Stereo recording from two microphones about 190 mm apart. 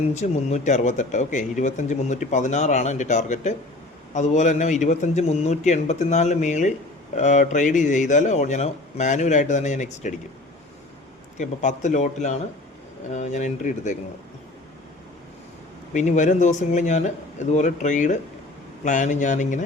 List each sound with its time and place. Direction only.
0.1 s speech: 35° left (ahead or behind)
11.3 s speech: 40° left (ahead or behind)
15.9 s speech: 40° left (ahead or behind)